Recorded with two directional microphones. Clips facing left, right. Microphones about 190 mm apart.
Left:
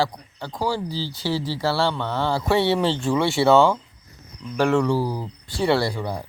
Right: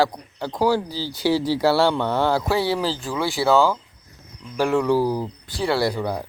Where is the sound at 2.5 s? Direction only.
Centre (ahead or behind).